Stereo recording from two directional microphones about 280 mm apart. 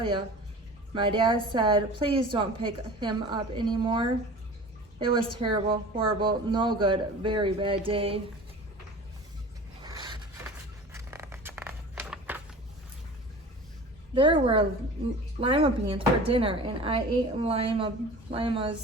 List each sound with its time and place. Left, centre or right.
0.9 s a woman's voice: centre
9.8 s a sound: centre
14.2 s speech: centre